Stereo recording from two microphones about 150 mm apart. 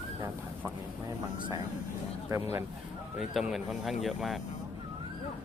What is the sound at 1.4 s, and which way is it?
Speech, 30° right (ahead or behind).